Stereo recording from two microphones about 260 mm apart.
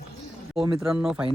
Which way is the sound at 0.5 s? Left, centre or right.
Centre.